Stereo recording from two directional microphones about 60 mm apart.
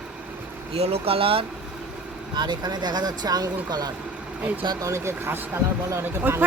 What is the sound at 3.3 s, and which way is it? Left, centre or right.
Speech, right.